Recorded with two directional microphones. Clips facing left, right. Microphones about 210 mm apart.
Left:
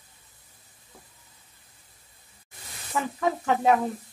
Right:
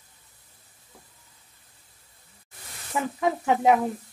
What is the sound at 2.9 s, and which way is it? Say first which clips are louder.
Speech: right 1 dB; 10° right (ahead or behind).